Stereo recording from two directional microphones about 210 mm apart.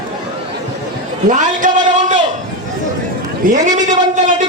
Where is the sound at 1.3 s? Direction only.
35° right (ahead or behind).